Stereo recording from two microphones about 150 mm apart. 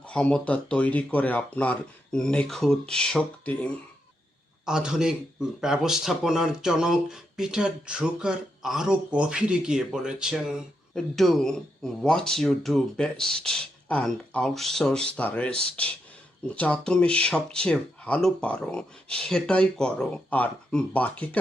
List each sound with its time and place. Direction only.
0.1 s speech: 5° left (ahead or behind)
4.6 s speech: 5° right (ahead or behind)